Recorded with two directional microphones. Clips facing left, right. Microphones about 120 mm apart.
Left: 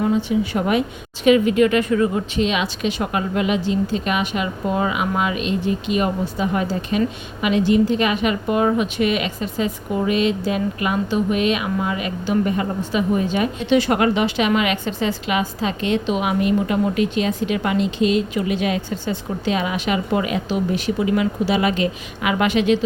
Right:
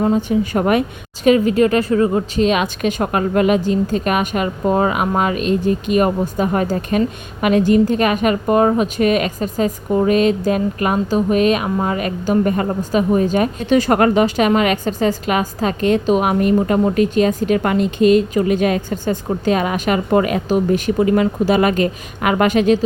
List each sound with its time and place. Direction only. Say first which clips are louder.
0.0 s a woman's voice: right 3 dB; 45° right (ahead or behind)